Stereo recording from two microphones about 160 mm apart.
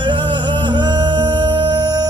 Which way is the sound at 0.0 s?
30° right (ahead or behind).